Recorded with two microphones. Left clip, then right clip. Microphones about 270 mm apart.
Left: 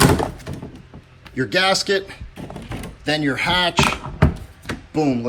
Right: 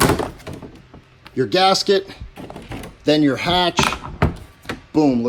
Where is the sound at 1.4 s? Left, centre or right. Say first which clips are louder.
Right 2 dB; centre.